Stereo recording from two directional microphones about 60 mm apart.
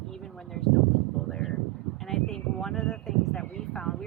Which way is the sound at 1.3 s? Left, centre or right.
Centre.